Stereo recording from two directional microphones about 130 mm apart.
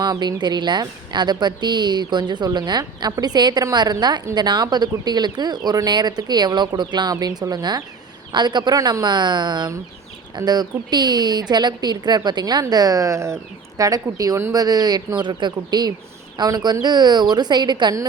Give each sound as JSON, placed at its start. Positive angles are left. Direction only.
{"t": 0.0, "sound": "speech", "side_deg": -30}